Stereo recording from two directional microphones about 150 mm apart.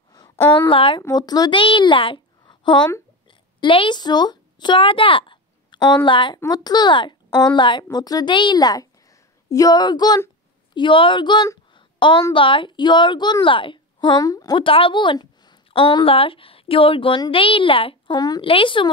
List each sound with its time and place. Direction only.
0.7 s a woman's voice: 35° left (ahead or behind)